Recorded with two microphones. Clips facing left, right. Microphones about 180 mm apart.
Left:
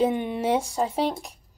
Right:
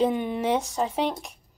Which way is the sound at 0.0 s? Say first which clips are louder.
Even; 10° left (ahead or behind).